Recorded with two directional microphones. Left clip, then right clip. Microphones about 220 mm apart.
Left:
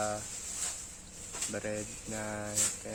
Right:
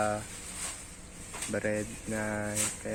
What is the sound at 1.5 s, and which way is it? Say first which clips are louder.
Speech: right 7 dB; 5° right (ahead or behind).